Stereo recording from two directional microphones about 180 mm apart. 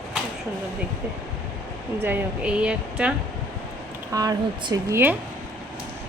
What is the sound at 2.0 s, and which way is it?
Speech, 10° right (ahead or behind).